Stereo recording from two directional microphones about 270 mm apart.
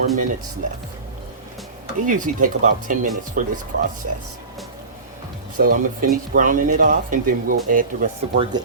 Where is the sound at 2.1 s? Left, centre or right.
Right.